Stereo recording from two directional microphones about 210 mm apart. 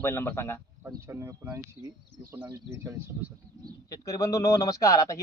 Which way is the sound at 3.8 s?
15° left (ahead or behind).